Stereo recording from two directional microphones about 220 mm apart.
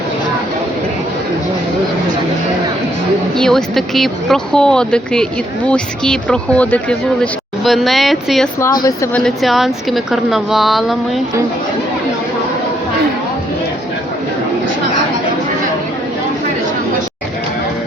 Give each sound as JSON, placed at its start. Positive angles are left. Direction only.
{"t": 3.3, "sound": "speech", "side_deg": 0}
{"t": 8.6, "sound": "speech", "side_deg": 15}
{"t": 9.1, "sound": "speech", "side_deg": 0}